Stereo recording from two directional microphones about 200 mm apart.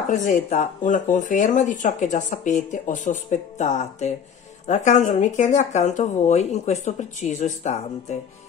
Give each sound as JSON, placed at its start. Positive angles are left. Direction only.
{"t": 0.1, "sound": "speech", "side_deg": 40}